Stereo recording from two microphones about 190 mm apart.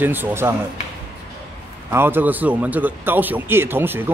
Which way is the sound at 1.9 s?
10° right (ahead or behind).